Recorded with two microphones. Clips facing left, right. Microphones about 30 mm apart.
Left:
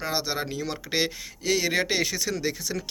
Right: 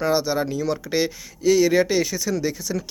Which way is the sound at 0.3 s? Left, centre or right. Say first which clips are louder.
Right 7 dB; left.